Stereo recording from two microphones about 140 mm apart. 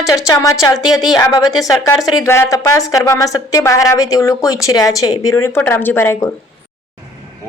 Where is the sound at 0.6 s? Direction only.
25° left (ahead or behind).